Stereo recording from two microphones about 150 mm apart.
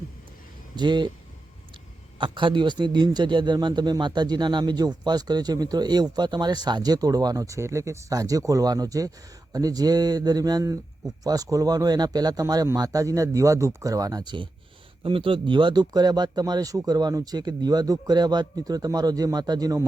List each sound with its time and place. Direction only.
0.8 s speech: 30° right (ahead or behind)
2.1 s a man's voice: 35° right (ahead or behind)